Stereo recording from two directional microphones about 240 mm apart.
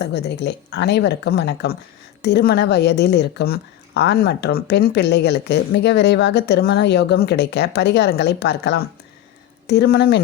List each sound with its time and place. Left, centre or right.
0.0 s speech: left